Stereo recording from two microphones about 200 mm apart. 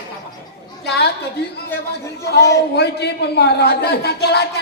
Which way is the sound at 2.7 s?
55° left (ahead or behind).